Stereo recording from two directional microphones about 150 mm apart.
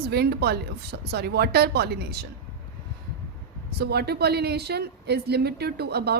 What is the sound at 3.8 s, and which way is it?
Speech, 90° right.